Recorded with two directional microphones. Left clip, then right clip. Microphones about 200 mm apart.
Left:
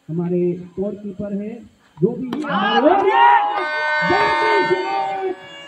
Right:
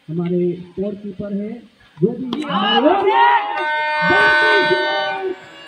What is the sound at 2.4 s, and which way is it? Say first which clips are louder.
Speech: even; 35° right (ahead or behind).